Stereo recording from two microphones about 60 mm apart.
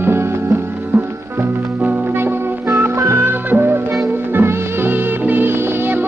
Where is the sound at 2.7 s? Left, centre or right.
Right.